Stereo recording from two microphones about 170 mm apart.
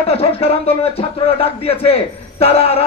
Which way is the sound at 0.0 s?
35° left (ahead or behind).